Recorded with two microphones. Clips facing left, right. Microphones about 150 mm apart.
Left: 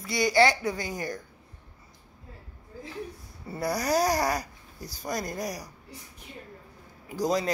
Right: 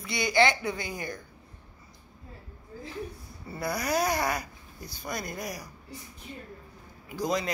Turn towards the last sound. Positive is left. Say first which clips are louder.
# left 3 dB
turn(degrees=35)  # may be behind; listen again after turning